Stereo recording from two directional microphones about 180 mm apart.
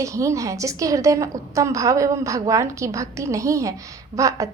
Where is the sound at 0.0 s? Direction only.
15° right (ahead or behind).